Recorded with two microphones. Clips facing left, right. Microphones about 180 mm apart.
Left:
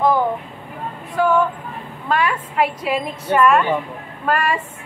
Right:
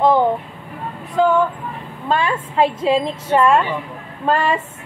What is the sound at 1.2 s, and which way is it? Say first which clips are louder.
A woman's voice: right 2 dB; 20° right (ahead or behind).